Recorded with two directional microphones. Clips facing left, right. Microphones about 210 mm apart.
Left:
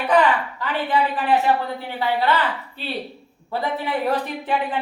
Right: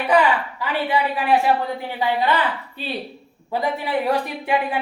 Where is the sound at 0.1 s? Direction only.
10° right (ahead or behind).